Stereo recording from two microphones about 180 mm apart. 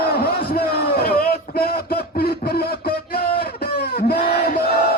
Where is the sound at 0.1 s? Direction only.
60° left (ahead or behind).